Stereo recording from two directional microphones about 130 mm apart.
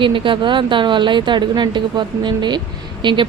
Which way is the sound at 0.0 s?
40° right (ahead or behind).